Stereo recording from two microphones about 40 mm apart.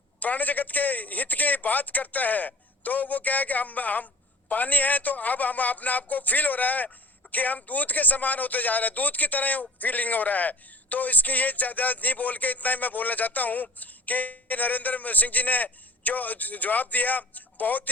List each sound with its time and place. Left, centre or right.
0.2 s a man's voice: left